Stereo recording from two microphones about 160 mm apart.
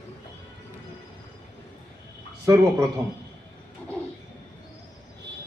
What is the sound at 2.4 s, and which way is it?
Speech, 20° right (ahead or behind).